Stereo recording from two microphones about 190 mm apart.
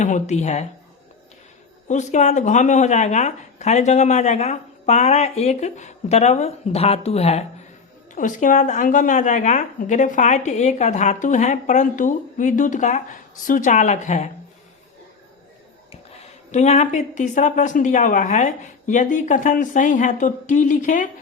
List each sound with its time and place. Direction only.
0.0 s a woman's voice: 40° left (ahead or behind)
1.9 s a woman's voice: 40° left (ahead or behind)
8.1 s a woman's voice: 45° left (ahead or behind)
16.5 s a woman's voice: 40° left (ahead or behind)